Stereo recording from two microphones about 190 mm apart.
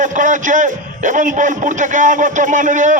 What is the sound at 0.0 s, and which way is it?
A man's voice, 40° right (ahead or behind).